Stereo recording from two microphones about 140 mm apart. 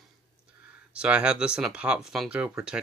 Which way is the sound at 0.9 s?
10° right (ahead or behind).